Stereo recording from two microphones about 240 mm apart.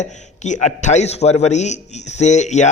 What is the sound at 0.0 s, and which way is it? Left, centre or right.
A man's voice, left.